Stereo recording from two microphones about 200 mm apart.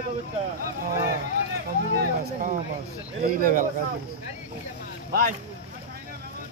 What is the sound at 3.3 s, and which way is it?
Speech, 45° right (ahead or behind).